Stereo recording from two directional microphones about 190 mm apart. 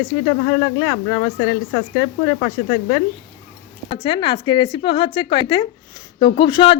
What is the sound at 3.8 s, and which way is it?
Speech, 25° left (ahead or behind).